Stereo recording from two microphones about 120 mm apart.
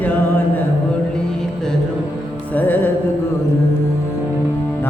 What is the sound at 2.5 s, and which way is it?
Music, 15° left (ahead or behind).